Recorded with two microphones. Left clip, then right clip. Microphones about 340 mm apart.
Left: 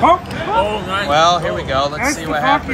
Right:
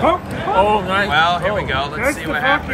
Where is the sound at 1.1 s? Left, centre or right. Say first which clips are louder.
Left 5 dB; centre.